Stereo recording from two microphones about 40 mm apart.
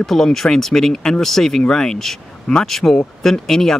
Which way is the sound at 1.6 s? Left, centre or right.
Centre.